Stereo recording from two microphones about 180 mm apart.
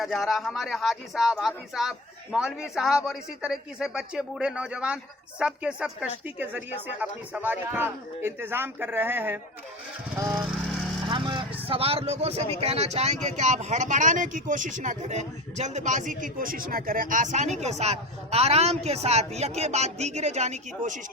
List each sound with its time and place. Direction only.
0.0 s speech: centre (ahead or behind); by 10.4 s 15° right (ahead or behind)
11.1 s vehicle: 25° right (ahead or behind)
11.7 s speech: 30° right (ahead or behind)